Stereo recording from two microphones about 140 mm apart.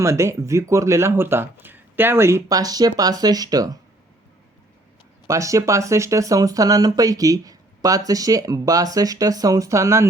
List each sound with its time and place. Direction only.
0.0 s speech: 20° right (ahead or behind)
5.3 s speech: 25° right (ahead or behind)